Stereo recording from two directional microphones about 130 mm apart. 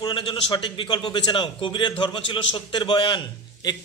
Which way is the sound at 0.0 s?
40° left (ahead or behind).